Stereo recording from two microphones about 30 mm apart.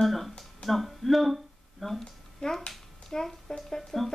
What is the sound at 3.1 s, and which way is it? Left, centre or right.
Speech, centre.